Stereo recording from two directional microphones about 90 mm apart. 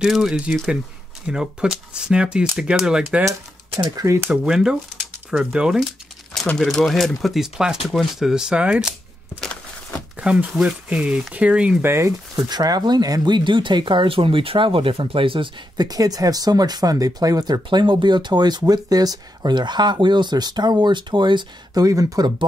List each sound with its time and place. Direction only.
0.0 s speech: 5° right (ahead or behind)
3.9 s speech: 40° right (ahead or behind)
4.3 s speech: 5° right (ahead or behind)
6.6 s speech: 5° left (ahead or behind); by 9.4 s 15° right (ahead or behind)
9.4 s a sound: 10° left (ahead or behind)
10.1 s speech: 15° right (ahead or behind)
11.8 s speech: 30° right (ahead or behind)
12.4 s speech: 45° right (ahead or behind); by 15.5 s 75° right (ahead or behind)
15.8 s speech: 45° right (ahead or behind)
21.8 s speech: 40° right (ahead or behind)